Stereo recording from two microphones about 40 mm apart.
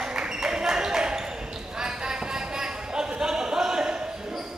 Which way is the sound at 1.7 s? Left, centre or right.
Centre.